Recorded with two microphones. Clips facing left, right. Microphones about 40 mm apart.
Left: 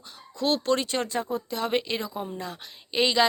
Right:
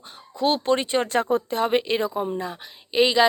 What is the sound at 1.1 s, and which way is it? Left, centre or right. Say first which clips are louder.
Speech: right 7 dB; right.